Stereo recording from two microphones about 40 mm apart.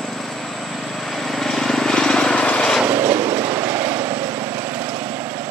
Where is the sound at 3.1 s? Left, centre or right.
Right.